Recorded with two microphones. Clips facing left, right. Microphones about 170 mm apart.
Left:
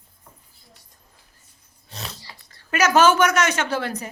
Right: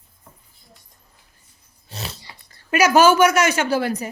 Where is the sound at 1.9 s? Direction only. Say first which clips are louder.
Right 3 dB; 5° right (ahead or behind).